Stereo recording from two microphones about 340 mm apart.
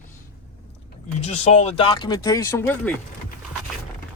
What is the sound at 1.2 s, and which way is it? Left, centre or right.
Speech, centre.